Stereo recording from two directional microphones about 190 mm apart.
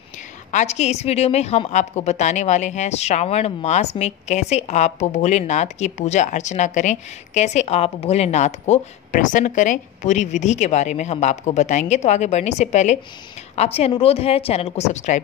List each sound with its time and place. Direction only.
0.5 s a woman's voice: 35° left (ahead or behind)